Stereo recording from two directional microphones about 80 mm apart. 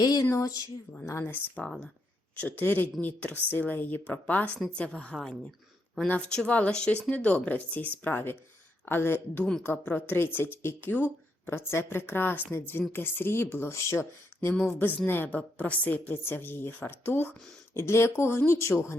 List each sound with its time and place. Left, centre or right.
0.0 s speech: left
0.3 s speech: left
1.2 s a woman's voice: centre
5.1 s speech: centre
6.1 s a woman's voice: centre; by 18.9 s left